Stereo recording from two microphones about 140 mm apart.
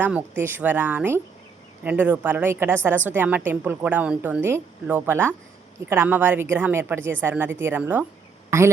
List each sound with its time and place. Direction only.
0.0 s a woman's voice: 10° right (ahead or behind)